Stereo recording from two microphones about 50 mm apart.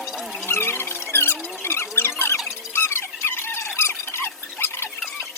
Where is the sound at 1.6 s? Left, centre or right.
Left.